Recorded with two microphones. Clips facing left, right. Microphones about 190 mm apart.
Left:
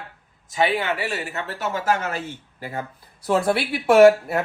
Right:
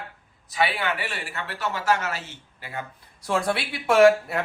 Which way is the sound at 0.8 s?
40° left (ahead or behind).